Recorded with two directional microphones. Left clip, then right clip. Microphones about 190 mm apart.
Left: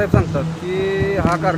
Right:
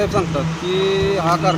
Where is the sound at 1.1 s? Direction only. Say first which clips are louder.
Right 1 dB; 5° left (ahead or behind).